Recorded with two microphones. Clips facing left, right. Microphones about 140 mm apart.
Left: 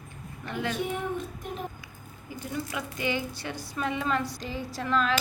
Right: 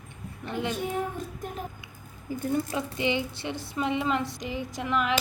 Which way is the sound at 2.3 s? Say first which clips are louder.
Right 7 dB; 40° right (ahead or behind).